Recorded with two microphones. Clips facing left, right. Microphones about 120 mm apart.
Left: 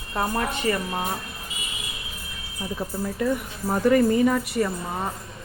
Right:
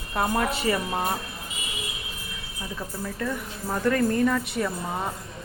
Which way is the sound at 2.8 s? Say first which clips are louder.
Left 5 dB; 15° left (ahead or behind).